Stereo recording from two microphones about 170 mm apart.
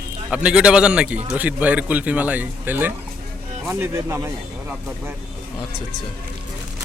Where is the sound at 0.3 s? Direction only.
5° right (ahead or behind).